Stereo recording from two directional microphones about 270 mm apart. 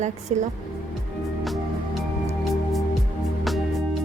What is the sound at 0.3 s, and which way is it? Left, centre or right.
Speech, right.